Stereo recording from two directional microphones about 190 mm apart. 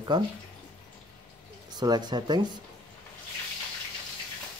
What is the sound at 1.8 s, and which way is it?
Speech, 20° right (ahead or behind).